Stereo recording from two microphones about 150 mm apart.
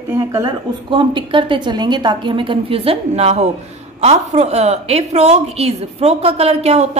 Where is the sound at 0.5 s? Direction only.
35° right (ahead or behind).